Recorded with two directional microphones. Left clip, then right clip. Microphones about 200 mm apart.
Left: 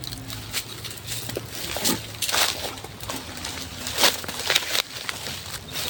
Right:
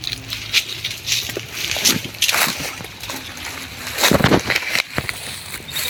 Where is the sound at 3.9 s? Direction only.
5° right (ahead or behind).